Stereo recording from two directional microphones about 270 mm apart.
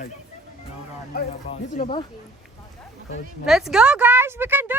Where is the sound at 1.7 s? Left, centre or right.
Left.